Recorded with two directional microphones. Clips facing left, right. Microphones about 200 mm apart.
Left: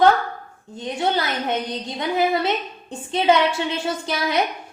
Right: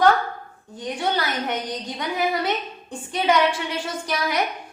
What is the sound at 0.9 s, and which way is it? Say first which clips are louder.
A woman's voice: left 2 dB; 25° left (ahead or behind).